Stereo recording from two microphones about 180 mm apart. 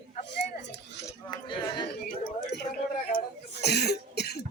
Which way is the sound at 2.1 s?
55° left (ahead or behind).